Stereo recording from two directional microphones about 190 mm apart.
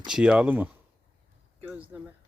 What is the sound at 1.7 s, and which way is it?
Speech, 10° right (ahead or behind).